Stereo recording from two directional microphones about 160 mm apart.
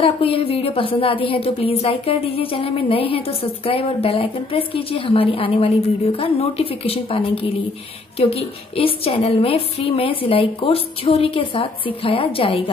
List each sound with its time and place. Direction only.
0.0 s speech: 35° left (ahead or behind)